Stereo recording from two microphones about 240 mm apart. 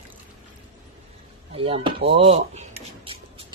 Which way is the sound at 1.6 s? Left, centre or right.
Right.